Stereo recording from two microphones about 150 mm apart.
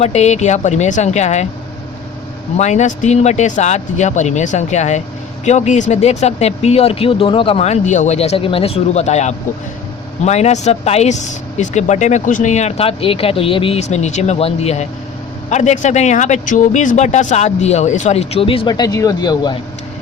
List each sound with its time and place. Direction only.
0.0 s speech: 50° left (ahead or behind)
2.6 s speech: 50° left (ahead or behind); by 19.5 s 25° left (ahead or behind)